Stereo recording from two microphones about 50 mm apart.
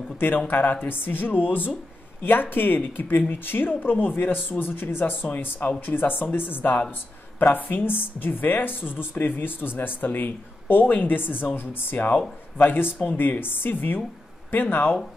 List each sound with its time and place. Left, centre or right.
0.5 s a woman's voice: left